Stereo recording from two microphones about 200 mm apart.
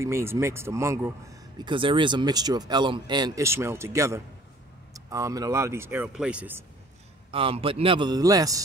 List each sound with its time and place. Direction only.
0.0 s speech: 15° right (ahead or behind)
7.2 s a man's voice: 25° right (ahead or behind)